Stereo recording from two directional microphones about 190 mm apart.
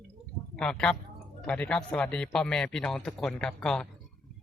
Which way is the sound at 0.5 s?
5° left (ahead or behind).